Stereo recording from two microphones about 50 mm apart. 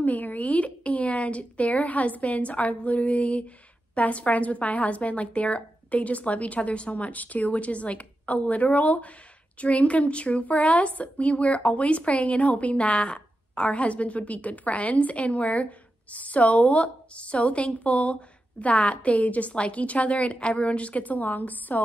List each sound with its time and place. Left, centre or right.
0.0 s a woman's voice: left